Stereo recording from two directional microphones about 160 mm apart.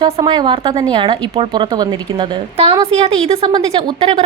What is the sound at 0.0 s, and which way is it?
Speech, 30° right (ahead or behind).